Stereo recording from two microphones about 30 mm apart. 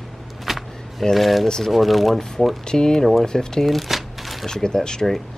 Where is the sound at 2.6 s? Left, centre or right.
Left.